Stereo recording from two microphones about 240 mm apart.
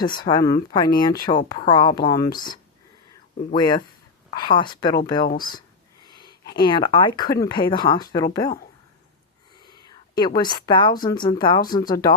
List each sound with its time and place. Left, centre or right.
0.0 s speech: centre
5.4 s a sound: centre
6.6 s speech: centre
9.6 s whispering: centre
11.0 s speech: centre